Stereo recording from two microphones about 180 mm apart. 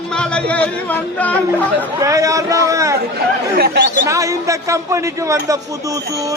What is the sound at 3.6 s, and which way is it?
Speech, 60° right (ahead or behind).